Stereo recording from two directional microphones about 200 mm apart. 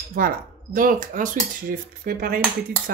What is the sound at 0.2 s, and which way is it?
Cutlery, 45° right (ahead or behind).